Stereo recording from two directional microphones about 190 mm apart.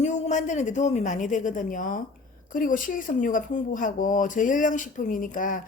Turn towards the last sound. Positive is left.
turn(degrees=45)  # may be behind; listen again after turning